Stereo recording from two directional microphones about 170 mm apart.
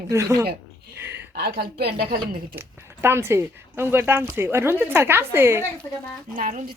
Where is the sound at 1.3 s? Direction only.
70° right (ahead or behind).